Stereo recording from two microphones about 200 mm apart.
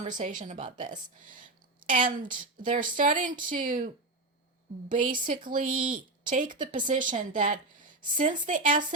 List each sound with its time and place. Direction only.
0.1 s speech: 40° right (ahead or behind)
1.9 s speech: 45° right (ahead or behind)
4.9 s speech: 40° right (ahead or behind)